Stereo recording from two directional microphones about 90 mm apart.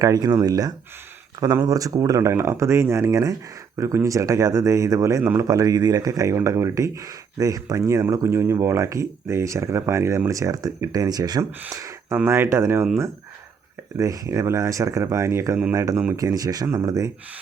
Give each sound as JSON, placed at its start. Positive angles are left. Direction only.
{"t": 0.0, "sound": "speech", "side_deg": -45}
{"t": 5.2, "sound": "speech", "side_deg": -25}
{"t": 5.5, "sound": "speech", "side_deg": -45}
{"t": 11.7, "sound": "a sound", "side_deg": -35}
{"t": 12.1, "sound": "speech", "side_deg": -25}
{"t": 14.0, "sound": "speech", "side_deg": -35}